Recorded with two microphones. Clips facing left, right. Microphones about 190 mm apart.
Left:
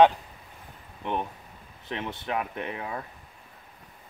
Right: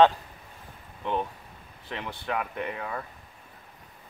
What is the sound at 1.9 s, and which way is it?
Speech, 20° left (ahead or behind).